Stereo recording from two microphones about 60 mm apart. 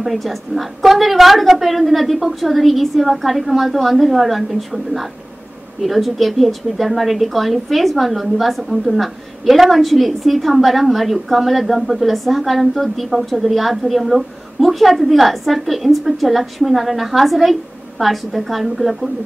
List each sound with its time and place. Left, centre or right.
0.0 s a woman's voice: centre